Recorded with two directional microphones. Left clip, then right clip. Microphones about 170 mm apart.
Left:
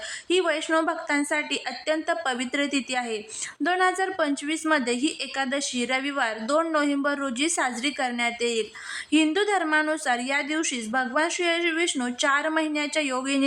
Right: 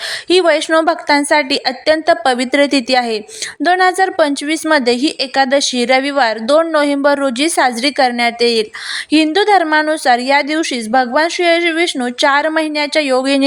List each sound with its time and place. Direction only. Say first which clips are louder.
0.3 s a woman's voice: right 12 dB; 40° right (ahead or behind)